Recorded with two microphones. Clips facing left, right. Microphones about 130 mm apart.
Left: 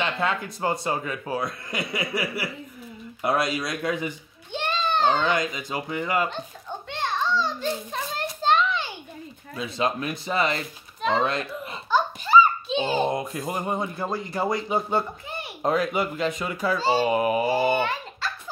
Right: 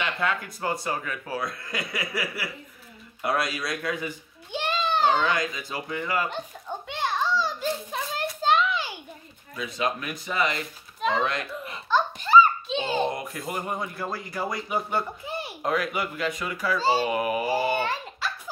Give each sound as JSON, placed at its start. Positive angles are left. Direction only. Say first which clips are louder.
{"t": 0.0, "sound": "a man's voice", "louder": "left 2 dB", "side_deg": 25}
{"t": 4.5, "sound": "a sound", "louder": "left 1 dB", "side_deg": -10}
{"t": 5.2, "sound": "a man's voice", "louder": "left 2 dB", "side_deg": 25}
{"t": 6.9, "sound": "children playing", "louder": "even", "side_deg": -10}
{"t": 9.6, "sound": "a man's voice", "louder": "left 2 dB", "side_deg": 30}
{"t": 11.0, "sound": "a sound", "louder": "left 2 dB", "side_deg": 0}
{"t": 11.2, "sound": "speech", "louder": "left 2 dB", "side_deg": 30}
{"t": 11.9, "sound": "baby laughter", "louder": "even", "side_deg": 5}
{"t": 13.1, "sound": "a man's voice", "louder": "left 4 dB", "side_deg": 25}